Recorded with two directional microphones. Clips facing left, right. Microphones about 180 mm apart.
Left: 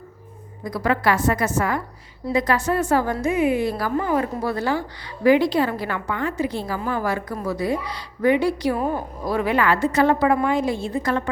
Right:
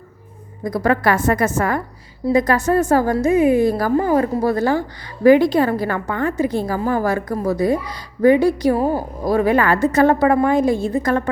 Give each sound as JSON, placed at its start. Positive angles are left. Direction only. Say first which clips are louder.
{"t": 0.6, "sound": "a woman's voice", "louder": "right 4 dB", "side_deg": -45}